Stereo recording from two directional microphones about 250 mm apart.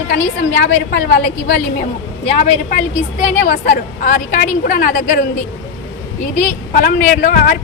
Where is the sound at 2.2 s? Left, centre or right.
Left.